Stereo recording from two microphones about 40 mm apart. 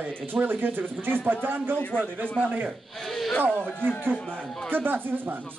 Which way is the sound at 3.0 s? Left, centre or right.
Centre.